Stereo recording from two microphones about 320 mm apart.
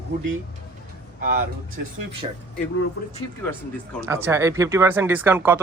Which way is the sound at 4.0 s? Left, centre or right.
Centre.